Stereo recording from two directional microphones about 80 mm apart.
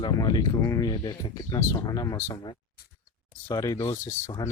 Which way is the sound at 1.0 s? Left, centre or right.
Left.